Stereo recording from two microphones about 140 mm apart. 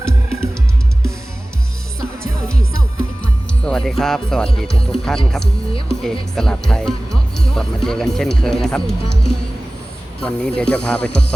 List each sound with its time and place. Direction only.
0.0 s music: 20° right (ahead or behind)
2.0 s music: 5° left (ahead or behind)
3.6 s speech: 5° left (ahead or behind)